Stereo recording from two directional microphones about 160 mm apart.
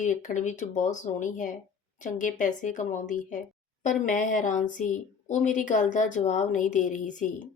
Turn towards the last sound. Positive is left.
turn(degrees=50)  # may be behind; listen again after turning